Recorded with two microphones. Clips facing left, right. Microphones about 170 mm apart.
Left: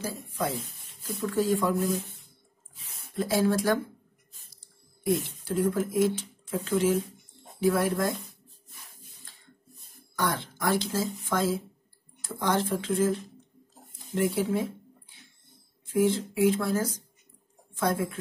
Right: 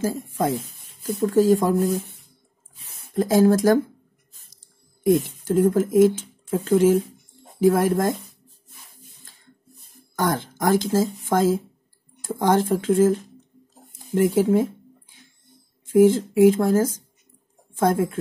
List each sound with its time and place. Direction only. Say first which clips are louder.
0.0 s speech: right 8 dB; 45° right (ahead or behind)
4.6 s a sound: right 1 dB; 45° right (ahead or behind)
5.4 s speech: right 8 dB; 45° right (ahead or behind)
10.1 s speech: right 6 dB; 45° right (ahead or behind)
15.9 s speech: right 9 dB; 45° right (ahead or behind)